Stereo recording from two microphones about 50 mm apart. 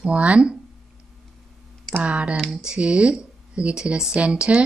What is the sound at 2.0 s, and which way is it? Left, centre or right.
Speech, right.